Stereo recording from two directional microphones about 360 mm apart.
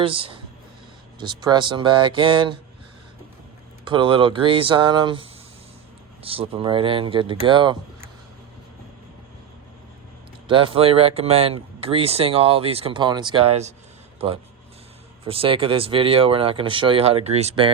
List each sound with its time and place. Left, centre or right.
0.0 s speech: centre
3.8 s speech: centre
10.5 s speech: centre
15.2 s speech: centre